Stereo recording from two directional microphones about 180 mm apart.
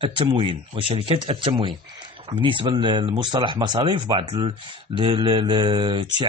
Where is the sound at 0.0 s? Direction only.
25° right (ahead or behind).